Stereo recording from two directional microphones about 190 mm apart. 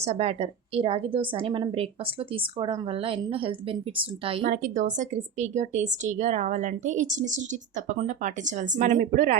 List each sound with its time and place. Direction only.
0.0 s a woman's voice: 35° right (ahead or behind)
4.4 s a woman's voice: 45° right (ahead or behind)